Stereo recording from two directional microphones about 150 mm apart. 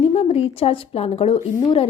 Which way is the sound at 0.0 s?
40° left (ahead or behind).